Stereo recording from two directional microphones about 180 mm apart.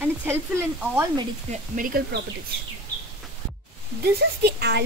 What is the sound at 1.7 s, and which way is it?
Speech, 50° right (ahead or behind).